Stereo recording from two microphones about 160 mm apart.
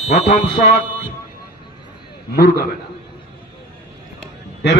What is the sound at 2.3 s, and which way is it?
Speech, 80° left.